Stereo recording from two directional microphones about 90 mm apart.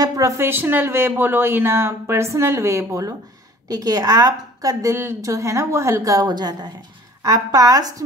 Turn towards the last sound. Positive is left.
turn(degrees=-45)  # may be behind; listen again after turning